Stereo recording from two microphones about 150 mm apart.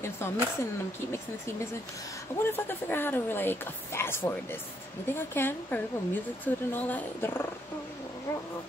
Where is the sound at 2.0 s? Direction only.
20° left (ahead or behind).